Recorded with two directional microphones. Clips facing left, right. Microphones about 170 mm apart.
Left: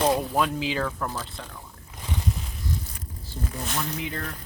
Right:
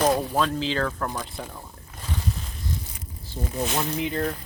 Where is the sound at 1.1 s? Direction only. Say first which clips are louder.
Right 3 dB; 15° right (ahead or behind).